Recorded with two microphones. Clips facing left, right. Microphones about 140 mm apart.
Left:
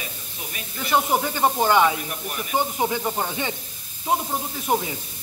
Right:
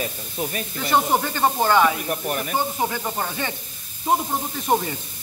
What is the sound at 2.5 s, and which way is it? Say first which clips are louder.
Speech: left 5 dB; 15° left (ahead or behind).